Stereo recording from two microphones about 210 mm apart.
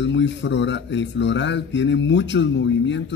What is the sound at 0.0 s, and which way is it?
A man's voice, 60° left (ahead or behind).